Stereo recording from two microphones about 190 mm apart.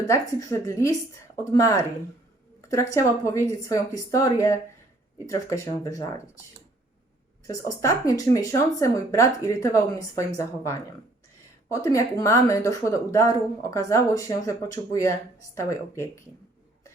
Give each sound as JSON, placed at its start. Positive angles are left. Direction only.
{"t": 0.1, "sound": "speech", "side_deg": 15}
{"t": 7.4, "sound": "speech", "side_deg": 15}